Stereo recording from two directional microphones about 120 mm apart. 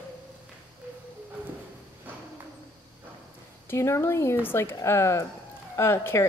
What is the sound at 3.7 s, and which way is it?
A woman's voice, 25° left (ahead or behind).